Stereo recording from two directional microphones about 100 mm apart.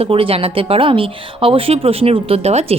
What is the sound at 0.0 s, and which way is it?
Speech, 70° right (ahead or behind).